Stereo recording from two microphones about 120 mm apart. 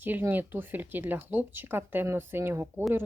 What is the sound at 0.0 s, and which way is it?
Speech, 15° right (ahead or behind).